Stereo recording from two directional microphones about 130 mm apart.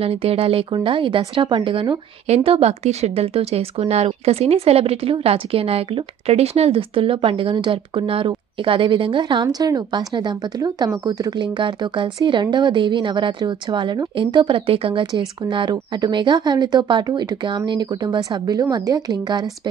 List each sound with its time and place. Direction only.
0.0 s a woman's voice: 50° right (ahead or behind)
2.2 s a woman's voice: 50° right (ahead or behind); by 19.7 s 30° right (ahead or behind)